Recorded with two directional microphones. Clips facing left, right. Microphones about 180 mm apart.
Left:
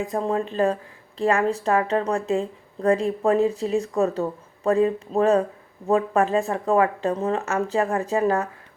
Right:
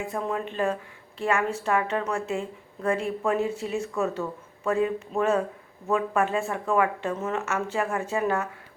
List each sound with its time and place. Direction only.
0.0 s speech: 35° left (ahead or behind)